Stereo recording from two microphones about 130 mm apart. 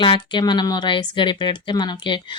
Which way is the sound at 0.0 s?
35° left (ahead or behind).